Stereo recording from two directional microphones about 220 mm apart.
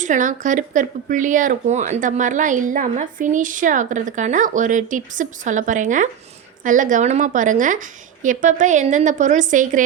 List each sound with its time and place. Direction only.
0.0 s speech: 35° right (ahead or behind)